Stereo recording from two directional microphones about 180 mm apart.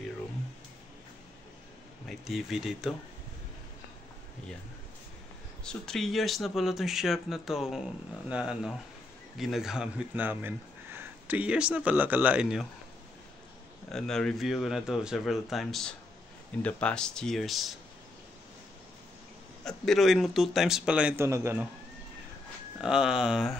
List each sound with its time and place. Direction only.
2.0 s speech: centre (ahead or behind)
5.6 s speech: 5° left (ahead or behind)
13.9 s speech: centre (ahead or behind)
19.6 s speech: centre (ahead or behind); by 21.6 s 15° right (ahead or behind)
22.8 s speech: 5° right (ahead or behind)